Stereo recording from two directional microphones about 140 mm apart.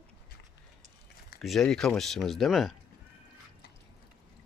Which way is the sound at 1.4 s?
Centre (ahead or behind).